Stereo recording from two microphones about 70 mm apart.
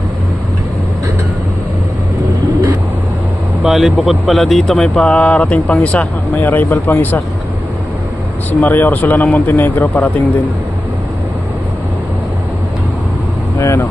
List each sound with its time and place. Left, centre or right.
3.6 s speech: centre
4.9 s speech: centre
8.5 s speech: left
13.6 s speech: left